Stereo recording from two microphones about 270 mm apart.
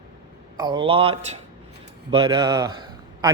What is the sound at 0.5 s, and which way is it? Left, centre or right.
A man's voice, centre.